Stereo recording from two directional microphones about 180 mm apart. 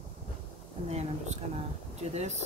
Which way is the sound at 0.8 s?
35° right (ahead or behind).